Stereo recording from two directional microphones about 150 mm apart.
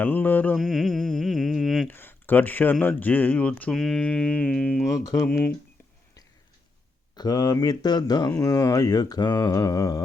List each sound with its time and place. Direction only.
0.0 s music: 10° left (ahead or behind)
1.9 s speech: 15° left (ahead or behind)
5.0 s mantra: 20° left (ahead or behind)
7.2 s mantra: 25° left (ahead or behind)